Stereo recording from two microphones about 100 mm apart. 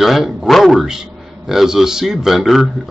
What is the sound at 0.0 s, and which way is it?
Speech, 5° right (ahead or behind).